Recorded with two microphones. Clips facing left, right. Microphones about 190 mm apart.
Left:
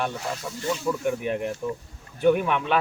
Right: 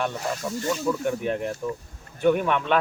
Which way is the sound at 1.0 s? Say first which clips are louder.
Even; 5° left (ahead or behind).